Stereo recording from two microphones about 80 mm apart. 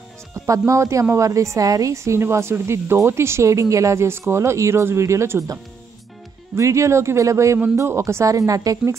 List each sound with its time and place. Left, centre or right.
0.3 s speech: right